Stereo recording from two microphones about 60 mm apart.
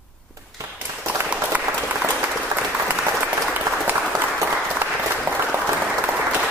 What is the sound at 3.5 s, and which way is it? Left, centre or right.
Applause, right.